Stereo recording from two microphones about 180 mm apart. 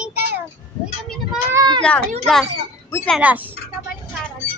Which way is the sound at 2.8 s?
15° left (ahead or behind).